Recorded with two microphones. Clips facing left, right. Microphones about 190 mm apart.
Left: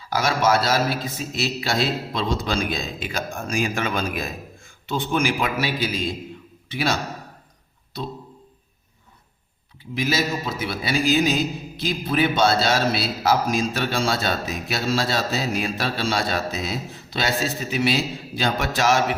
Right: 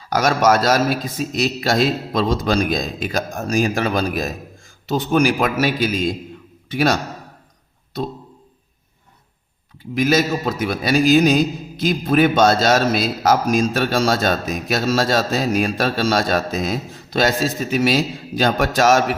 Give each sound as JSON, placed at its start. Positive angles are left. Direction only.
{"t": 0.1, "sound": "a man's voice", "side_deg": -45}
{"t": 9.9, "sound": "a man's voice", "side_deg": -45}